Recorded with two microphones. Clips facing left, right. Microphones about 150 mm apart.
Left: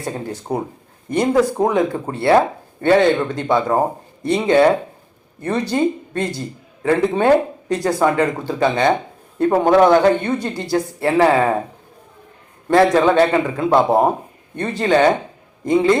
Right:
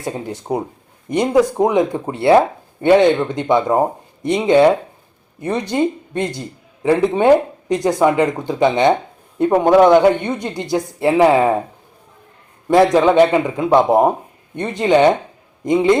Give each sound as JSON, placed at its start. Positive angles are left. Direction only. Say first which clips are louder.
{"t": 0.1, "sound": "speech", "louder": "right 2 dB", "side_deg": -20}
{"t": 12.6, "sound": "speech", "louder": "right 1 dB", "side_deg": -15}